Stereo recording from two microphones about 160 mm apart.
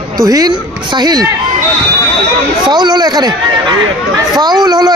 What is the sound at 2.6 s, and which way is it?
Speech, 25° right (ahead or behind).